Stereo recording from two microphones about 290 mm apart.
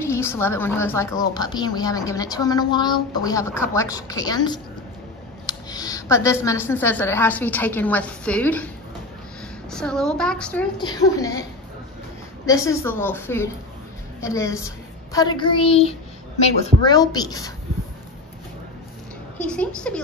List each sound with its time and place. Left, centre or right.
0.0 s speech: centre
9.7 s a woman's voice: centre
12.4 s speech: centre
19.3 s a woman's voice: centre